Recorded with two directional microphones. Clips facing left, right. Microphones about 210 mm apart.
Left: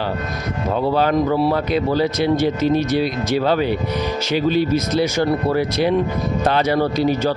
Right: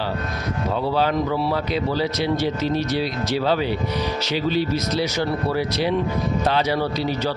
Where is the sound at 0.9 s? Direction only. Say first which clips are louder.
Left 5 dB; 50° left (ahead or behind).